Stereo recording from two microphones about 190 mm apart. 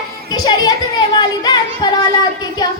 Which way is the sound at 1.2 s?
20° left (ahead or behind).